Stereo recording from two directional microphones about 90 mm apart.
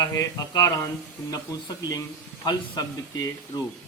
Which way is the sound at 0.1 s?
40° left (ahead or behind).